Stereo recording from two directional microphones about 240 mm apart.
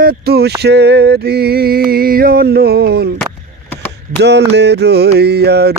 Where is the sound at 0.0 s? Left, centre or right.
Right.